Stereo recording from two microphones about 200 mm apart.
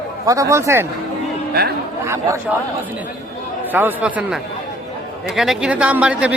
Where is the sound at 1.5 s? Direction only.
50° right (ahead or behind).